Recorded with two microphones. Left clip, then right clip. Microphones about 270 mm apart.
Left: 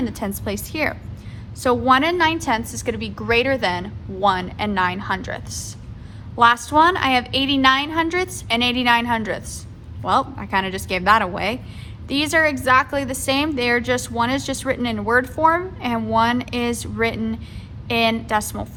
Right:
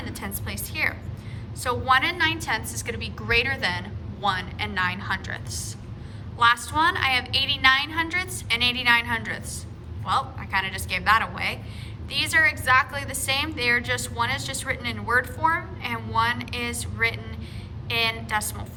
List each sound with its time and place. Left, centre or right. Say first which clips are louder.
0.0 s a woman's voice: left 8 dB; centre